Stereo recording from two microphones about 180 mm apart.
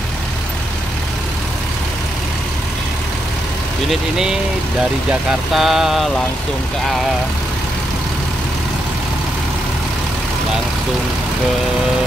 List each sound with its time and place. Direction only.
3.9 s vehicle: 5° right (ahead or behind)
5.5 s vehicle: centre (ahead or behind)